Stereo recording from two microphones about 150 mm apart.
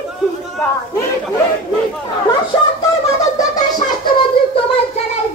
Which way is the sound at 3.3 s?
25° left (ahead or behind).